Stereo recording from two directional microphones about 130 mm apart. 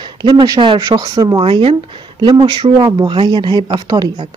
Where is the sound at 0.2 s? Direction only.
35° right (ahead or behind).